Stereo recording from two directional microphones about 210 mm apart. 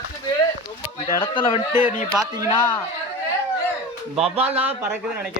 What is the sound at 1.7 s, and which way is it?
Speech, 10° right (ahead or behind).